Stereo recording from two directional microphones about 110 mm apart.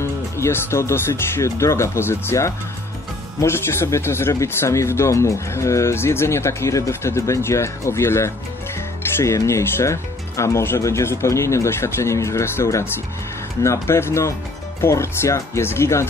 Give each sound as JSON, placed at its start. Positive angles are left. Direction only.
{"t": 0.0, "sound": "speech", "side_deg": 25}